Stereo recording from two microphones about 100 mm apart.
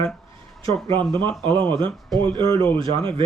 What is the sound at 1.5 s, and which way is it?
Speech, 20° left (ahead or behind).